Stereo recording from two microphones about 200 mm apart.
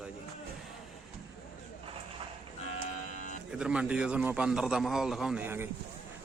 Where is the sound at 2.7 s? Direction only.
40° left (ahead or behind).